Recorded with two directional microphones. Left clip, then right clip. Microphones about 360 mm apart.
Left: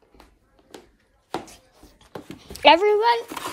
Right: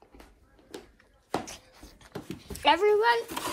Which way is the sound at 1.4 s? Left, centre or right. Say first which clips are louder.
Right 1 dB; centre.